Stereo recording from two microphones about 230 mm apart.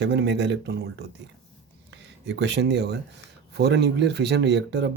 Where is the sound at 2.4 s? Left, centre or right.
Right.